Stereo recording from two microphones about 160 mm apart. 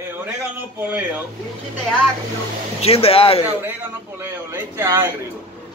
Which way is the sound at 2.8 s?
40° left (ahead or behind).